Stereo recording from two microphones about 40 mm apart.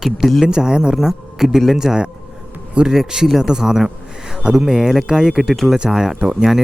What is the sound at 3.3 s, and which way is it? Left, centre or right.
Speech, centre.